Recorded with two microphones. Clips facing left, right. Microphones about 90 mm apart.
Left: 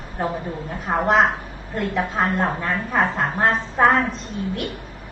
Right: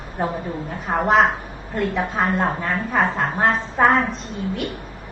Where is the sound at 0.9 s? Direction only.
10° left (ahead or behind).